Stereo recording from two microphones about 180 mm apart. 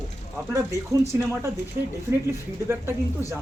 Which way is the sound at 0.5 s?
15° right (ahead or behind).